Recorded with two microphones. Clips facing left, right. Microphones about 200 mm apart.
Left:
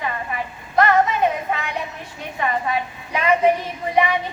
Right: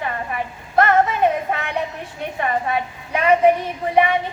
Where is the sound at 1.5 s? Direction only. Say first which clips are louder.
Right 1 dB; 50° right (ahead or behind).